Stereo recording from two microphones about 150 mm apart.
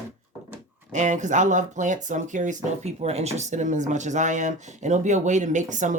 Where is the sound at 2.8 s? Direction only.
45° right (ahead or behind).